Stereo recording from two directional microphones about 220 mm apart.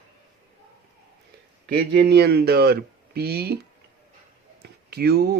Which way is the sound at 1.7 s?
45° right (ahead or behind).